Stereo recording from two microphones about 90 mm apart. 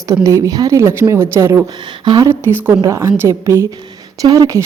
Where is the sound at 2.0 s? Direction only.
55° right (ahead or behind).